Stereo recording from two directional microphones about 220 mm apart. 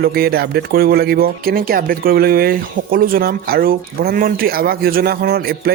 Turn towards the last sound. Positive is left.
turn(degrees=-45)  # may be behind; listen again after turning